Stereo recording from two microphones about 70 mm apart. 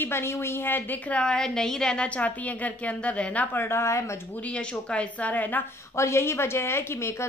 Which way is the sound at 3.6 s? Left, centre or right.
Left.